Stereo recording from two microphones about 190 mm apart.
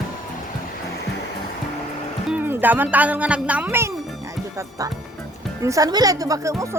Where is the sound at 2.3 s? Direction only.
10° right (ahead or behind).